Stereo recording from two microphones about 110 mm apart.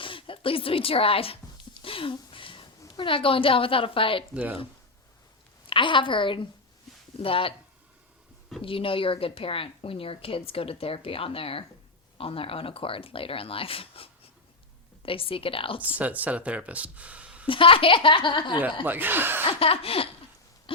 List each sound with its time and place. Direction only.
0.0 s speech: 50° left (ahead or behind)
1.8 s a sound: 55° left (ahead or behind)
3.0 s a woman's voice: 55° left (ahead or behind)
5.6 s a woman's voice: 50° left (ahead or behind)
8.6 s a woman's voice: 55° left (ahead or behind)
16.0 s speech: 15° right (ahead or behind)
17.4 s a woman's voice: 50° left (ahead or behind)
18.9 s speech: 15° right (ahead or behind)
19.5 s a woman's voice: 60° left (ahead or behind)
20.7 s a sound: 55° left (ahead or behind)